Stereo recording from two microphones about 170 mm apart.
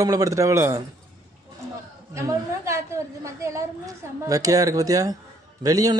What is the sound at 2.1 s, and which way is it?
A man's voice, 15° right (ahead or behind).